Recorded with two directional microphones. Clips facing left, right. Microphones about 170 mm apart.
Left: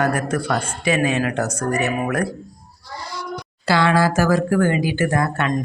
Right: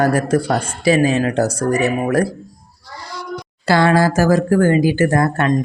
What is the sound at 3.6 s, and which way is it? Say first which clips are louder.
Speech: right 3 dB; 45° right (ahead or behind).